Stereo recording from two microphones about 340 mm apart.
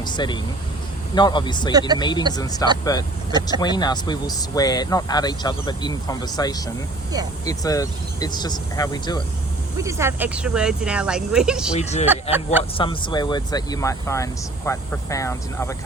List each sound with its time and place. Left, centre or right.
0.0 s vehicle: centre
1.1 s speech: centre
9.8 s speech: centre
11.7 s speech: centre